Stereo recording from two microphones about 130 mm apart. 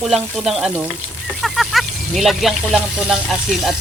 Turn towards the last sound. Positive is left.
turn(degrees=0)  # may be behind; listen again after turning